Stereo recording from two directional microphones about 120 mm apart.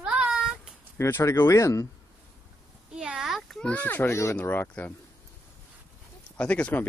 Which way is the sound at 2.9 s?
5° right (ahead or behind).